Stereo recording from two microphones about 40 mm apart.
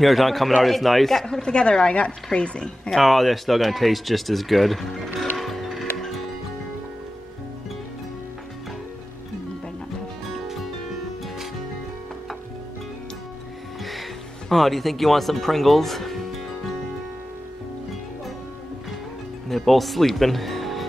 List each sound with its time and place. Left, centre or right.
0.0 s speech: centre
1.2 s speech: centre
2.9 s speech: centre
14.5 s speech: centre
19.5 s speech: centre